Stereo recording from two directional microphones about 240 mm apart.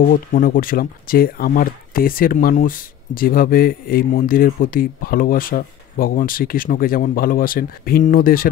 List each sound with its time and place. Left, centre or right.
0.0 s speech: left